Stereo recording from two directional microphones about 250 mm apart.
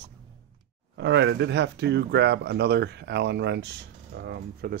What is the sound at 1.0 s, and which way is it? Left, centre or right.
Speech, right.